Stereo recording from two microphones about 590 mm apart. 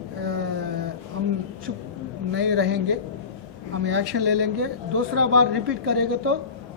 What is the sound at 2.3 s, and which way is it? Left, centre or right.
Speech, centre.